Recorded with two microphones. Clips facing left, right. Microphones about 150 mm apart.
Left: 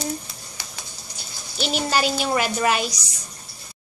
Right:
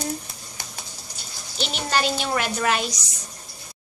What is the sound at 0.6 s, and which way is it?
Typing, 55° right (ahead or behind).